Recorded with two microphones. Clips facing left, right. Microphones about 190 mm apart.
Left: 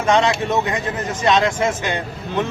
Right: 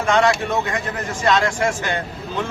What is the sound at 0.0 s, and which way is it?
Speech, 20° left (ahead or behind).